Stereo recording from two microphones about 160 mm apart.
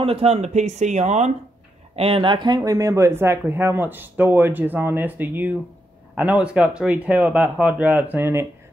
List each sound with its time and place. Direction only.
0.0 s speech: 40° right (ahead or behind); by 8.5 s 15° right (ahead or behind)